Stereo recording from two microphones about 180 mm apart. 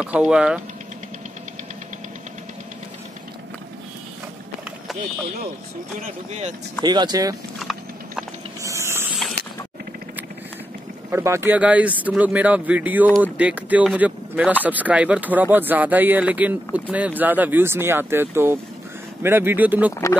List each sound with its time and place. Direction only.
0.0 s speech: 5° right (ahead or behind)
5.9 s speech: 40° right (ahead or behind)
6.8 s speech: 25° right (ahead or behind)
8.6 s a sound: 15° right (ahead or behind)
11.1 s speech: 15° right (ahead or behind)